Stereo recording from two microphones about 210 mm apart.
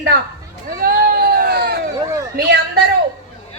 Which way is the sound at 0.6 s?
45° right (ahead or behind).